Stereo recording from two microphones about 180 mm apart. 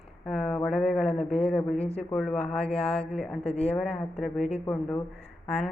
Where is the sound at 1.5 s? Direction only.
5° left (ahead or behind).